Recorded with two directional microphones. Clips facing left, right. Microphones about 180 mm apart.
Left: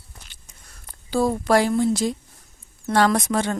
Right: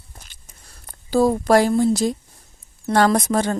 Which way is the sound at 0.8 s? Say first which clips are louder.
Right 4 dB; 40° right (ahead or behind).